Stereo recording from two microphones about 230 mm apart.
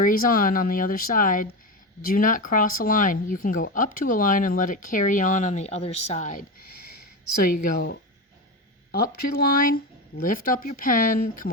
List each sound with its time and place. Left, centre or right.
0.0 s speech: left